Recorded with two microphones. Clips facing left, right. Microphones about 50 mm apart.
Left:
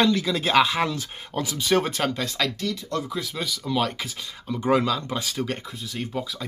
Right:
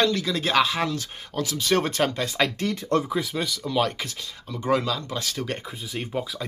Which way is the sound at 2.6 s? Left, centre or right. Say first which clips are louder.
Right 4 dB; right.